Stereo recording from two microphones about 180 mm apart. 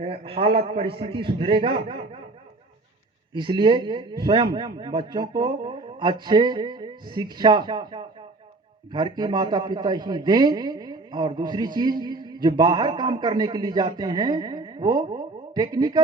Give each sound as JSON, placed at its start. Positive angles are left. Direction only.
{"t": 0.0, "sound": "a man's voice", "side_deg": -30}
{"t": 3.3, "sound": "speech", "side_deg": -25}